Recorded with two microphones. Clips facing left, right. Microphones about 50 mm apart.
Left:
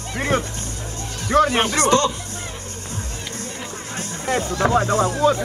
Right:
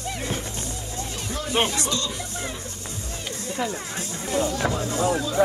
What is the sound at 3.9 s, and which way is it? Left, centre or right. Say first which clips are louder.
Speech: left 4 dB; left.